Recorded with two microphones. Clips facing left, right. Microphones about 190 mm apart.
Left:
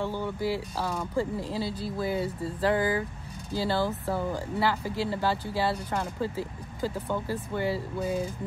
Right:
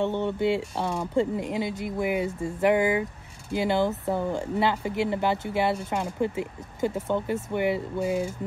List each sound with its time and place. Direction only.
0.0 s speech: 25° right (ahead or behind)